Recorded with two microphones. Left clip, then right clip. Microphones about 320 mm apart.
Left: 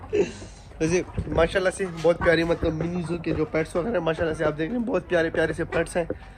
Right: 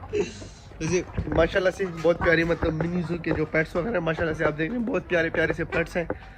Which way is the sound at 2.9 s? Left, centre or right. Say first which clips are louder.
Even; left.